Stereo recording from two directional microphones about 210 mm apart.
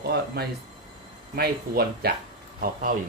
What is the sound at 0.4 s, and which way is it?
Speech, 50° right (ahead or behind).